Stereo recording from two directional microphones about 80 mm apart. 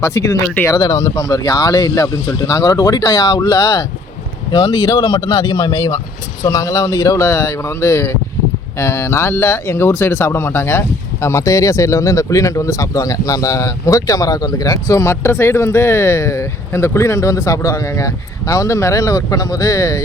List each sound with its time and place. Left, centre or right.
0.0 s speech: left
0.7 s speech: left
4.5 s speech: left
5.7 s speech: left
7.3 s speech: left